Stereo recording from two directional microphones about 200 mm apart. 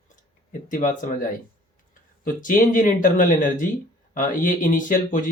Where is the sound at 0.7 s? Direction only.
40° left (ahead or behind).